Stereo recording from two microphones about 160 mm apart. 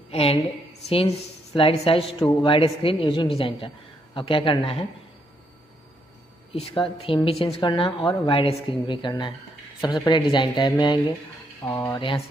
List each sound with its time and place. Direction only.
0.1 s a woman's voice: 35° left (ahead or behind)
6.5 s a woman's voice: 35° left (ahead or behind)